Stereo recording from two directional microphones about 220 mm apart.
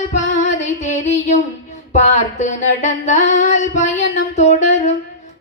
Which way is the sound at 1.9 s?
35° left (ahead or behind).